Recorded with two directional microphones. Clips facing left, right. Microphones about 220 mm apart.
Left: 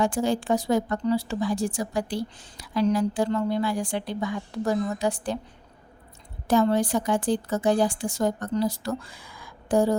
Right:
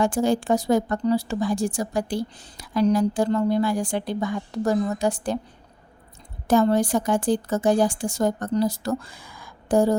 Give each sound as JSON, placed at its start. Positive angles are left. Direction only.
{"t": 0.0, "sound": "speech", "side_deg": -45}
{"t": 6.5, "sound": "speech", "side_deg": -45}